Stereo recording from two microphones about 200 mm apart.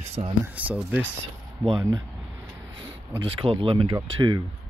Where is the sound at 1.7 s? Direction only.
20° right (ahead or behind).